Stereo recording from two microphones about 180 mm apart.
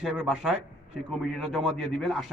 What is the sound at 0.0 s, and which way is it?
A man's voice, centre (ahead or behind).